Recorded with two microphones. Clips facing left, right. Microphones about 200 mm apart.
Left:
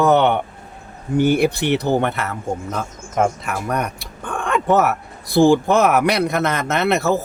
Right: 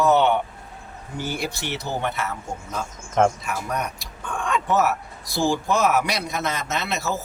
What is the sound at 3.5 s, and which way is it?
Speech, 60° left (ahead or behind).